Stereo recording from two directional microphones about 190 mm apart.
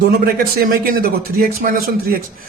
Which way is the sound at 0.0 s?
55° right (ahead or behind).